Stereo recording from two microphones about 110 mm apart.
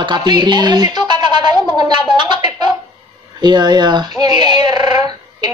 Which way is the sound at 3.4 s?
40° right (ahead or behind).